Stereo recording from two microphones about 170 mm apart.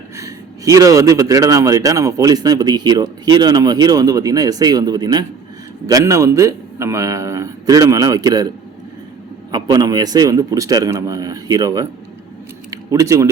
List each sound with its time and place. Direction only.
0.2 s a man's voice: 20° right (ahead or behind)
9.5 s a man's voice: 25° right (ahead or behind)